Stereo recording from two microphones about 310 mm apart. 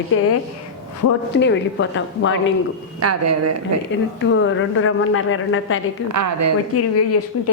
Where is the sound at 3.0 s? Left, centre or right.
Right.